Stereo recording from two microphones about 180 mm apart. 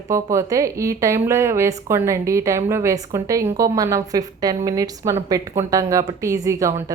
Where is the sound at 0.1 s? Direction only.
15° right (ahead or behind).